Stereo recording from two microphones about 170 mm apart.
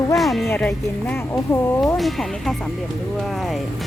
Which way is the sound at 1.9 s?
Centre (ahead or behind).